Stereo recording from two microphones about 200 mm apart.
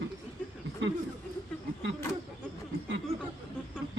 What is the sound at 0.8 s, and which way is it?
Speech, 65° right (ahead or behind).